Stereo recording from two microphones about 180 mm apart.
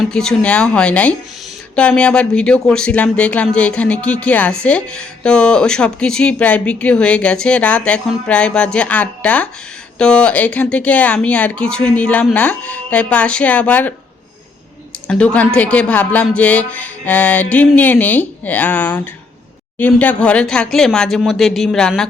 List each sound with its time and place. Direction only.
0.0 s speech: 5° left (ahead or behind)
15.0 s speech: 5° left (ahead or behind)